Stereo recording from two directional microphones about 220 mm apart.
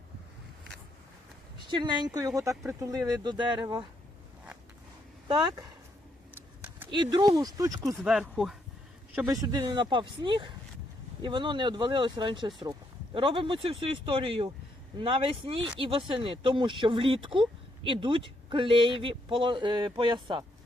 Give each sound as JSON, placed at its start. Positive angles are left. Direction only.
{"t": 1.7, "sound": "speech", "side_deg": -20}
{"t": 6.9, "sound": "speech", "side_deg": -20}
{"t": 8.0, "sound": "speech", "side_deg": 0}
{"t": 9.3, "sound": "speech", "side_deg": -15}